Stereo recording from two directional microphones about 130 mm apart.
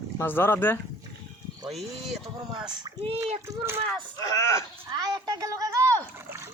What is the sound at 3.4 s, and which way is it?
Speech, 20° right (ahead or behind).